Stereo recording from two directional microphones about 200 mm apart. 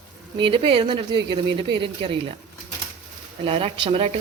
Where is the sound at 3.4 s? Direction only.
25° right (ahead or behind).